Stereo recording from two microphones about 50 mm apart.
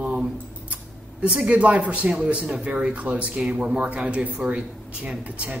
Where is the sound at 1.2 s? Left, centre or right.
Right.